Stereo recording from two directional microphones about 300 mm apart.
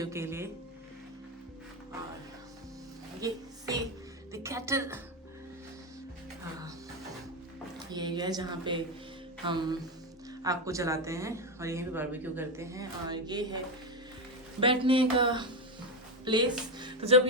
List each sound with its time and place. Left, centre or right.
0.0 s speech: centre
3.2 s speech: centre
7.8 s speech: centre
14.6 s speech: centre